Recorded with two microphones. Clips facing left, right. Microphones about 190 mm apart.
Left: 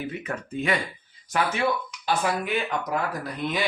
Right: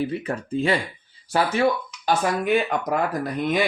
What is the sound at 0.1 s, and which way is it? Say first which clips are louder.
Speech: right 6 dB; 30° right (ahead or behind).